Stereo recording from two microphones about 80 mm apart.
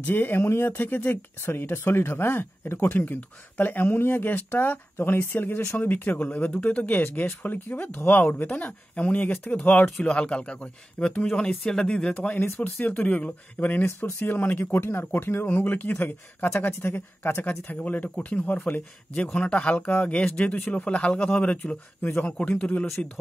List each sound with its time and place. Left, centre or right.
0.0 s speech: left